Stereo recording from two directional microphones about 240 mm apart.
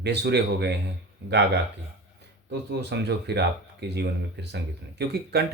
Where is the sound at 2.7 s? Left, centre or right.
Right.